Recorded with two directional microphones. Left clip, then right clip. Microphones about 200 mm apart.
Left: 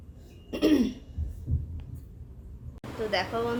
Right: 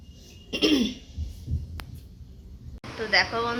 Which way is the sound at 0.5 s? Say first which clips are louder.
Right 1 dB; 20° right (ahead or behind).